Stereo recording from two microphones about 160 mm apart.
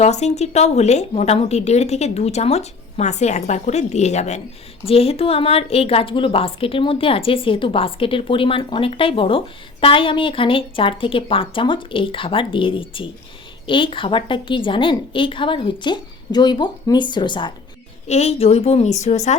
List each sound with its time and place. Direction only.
0.0 s a woman's voice: 45° left (ahead or behind)
18.1 s speech: 40° left (ahead or behind)